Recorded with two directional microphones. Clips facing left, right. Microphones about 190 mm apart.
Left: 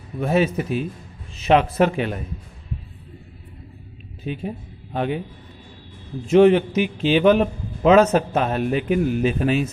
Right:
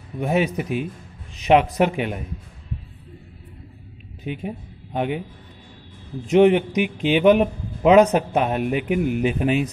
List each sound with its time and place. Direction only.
0.2 s a man's voice: 15° right (ahead or behind)
4.2 s speech: 15° right (ahead or behind)
6.2 s a man's voice: 15° right (ahead or behind)